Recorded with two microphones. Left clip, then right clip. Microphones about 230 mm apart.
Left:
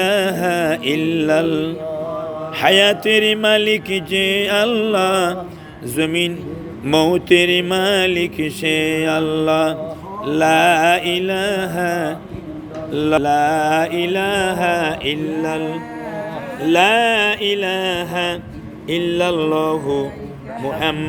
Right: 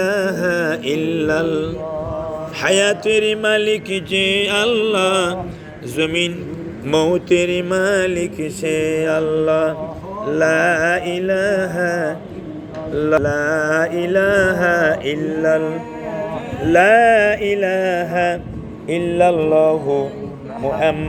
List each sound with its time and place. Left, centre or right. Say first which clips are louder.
0.0 s mantra: left 1 dB; left
2.6 s a sound: left 3 dB; left
4.2 s mantra: right 1 dB; left
4.5 s mantra: even; left
6.8 s a sound: left 1 dB; left
10.2 s mantra: left 2 dB; left